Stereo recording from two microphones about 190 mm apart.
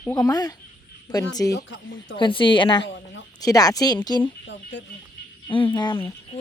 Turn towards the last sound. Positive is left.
turn(degrees=25)  # may be behind; listen again after turning